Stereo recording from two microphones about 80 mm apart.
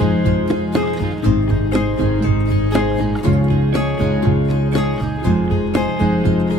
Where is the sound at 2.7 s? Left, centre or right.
Centre.